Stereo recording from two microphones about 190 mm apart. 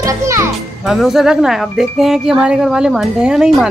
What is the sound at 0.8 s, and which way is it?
Speech, centre (ahead or behind).